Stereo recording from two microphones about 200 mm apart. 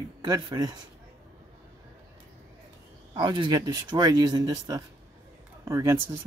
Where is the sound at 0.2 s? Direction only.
20° right (ahead or behind).